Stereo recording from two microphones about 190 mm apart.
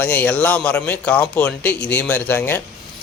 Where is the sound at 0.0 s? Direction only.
10° left (ahead or behind).